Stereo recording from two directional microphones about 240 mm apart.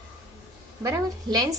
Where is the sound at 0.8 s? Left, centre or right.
Centre.